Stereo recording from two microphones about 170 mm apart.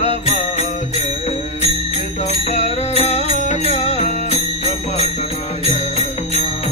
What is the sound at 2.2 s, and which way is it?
Music, 40° left (ahead or behind).